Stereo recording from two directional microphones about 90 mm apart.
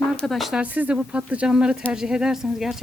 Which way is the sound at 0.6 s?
20° right (ahead or behind).